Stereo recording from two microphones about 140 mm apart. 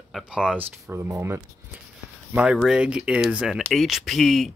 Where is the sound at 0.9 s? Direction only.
20° right (ahead or behind).